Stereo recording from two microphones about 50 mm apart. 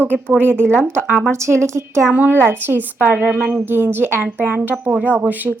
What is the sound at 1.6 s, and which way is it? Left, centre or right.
Speech, right.